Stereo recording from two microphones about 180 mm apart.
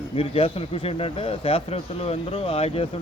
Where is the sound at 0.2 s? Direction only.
30° left (ahead or behind).